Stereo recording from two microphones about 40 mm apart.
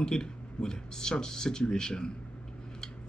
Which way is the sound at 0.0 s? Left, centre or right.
Centre.